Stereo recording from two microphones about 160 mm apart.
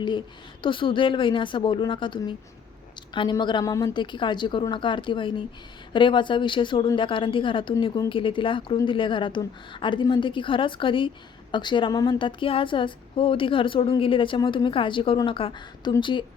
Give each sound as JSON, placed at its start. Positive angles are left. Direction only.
{"t": 0.6, "sound": "a woman's voice", "side_deg": 30}